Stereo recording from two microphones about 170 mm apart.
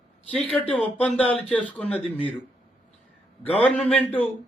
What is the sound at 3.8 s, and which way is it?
Speech, 10° left (ahead or behind).